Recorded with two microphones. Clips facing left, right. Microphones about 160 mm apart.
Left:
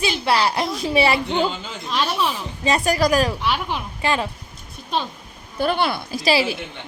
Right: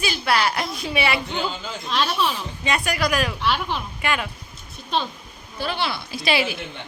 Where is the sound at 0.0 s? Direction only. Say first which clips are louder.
Left 2 dB; 25° left (ahead or behind).